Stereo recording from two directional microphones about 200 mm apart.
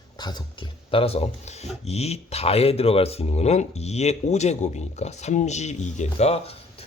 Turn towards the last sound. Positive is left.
turn(degrees=30)  # may be behind; listen again after turning